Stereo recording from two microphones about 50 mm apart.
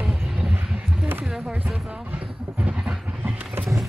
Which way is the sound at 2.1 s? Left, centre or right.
Right.